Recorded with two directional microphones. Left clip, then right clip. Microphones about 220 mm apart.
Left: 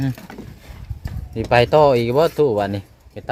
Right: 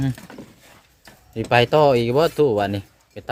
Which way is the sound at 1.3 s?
10° right (ahead or behind).